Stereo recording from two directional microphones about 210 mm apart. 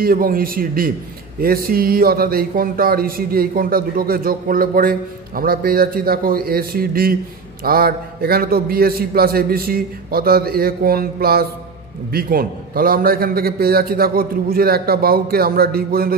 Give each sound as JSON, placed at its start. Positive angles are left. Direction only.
{"t": 0.0, "sound": "speech", "side_deg": -45}